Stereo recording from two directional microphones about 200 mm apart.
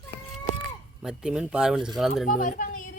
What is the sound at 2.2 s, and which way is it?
Speech, 40° left (ahead or behind).